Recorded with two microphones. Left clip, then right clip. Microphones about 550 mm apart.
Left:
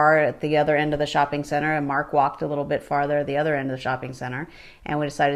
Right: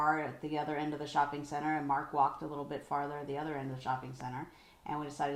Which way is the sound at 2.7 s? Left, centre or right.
Left.